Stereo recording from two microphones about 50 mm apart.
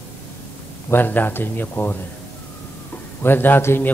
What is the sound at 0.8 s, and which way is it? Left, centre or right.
Speech, left.